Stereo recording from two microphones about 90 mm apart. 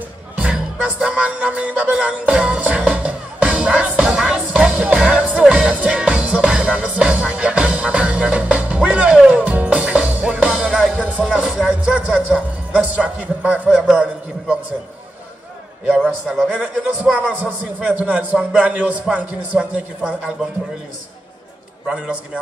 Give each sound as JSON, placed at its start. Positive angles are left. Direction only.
{"t": 0.4, "sound": "music", "side_deg": -15}
{"t": 10.9, "sound": "a man's voice", "side_deg": -15}
{"t": 16.4, "sound": "a man's voice", "side_deg": -15}
{"t": 21.8, "sound": "a man's voice", "side_deg": -15}